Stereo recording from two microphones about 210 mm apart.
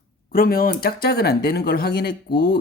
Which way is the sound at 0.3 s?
45° left (ahead or behind).